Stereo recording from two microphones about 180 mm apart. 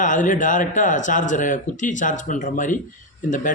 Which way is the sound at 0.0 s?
45° left (ahead or behind).